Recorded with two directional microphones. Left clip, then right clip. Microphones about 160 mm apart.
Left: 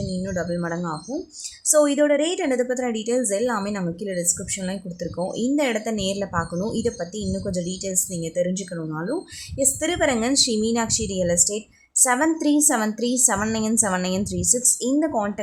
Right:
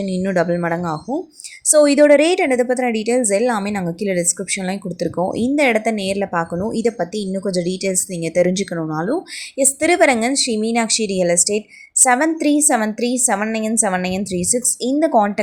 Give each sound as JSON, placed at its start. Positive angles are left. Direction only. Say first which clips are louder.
{"t": 0.2, "sound": "a woman's voice", "louder": "right 10 dB", "side_deg": -25}